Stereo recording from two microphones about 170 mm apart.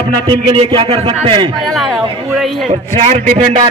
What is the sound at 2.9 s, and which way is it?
Speech, 40° right (ahead or behind).